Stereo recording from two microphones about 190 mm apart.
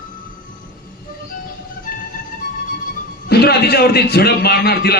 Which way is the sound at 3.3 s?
55° left (ahead or behind).